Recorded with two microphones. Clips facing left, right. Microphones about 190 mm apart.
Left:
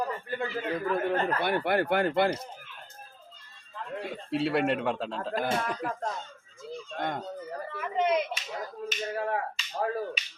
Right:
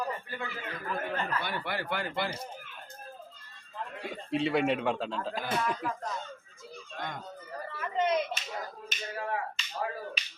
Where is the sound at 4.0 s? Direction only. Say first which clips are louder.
Left 1 dB; centre (ahead or behind).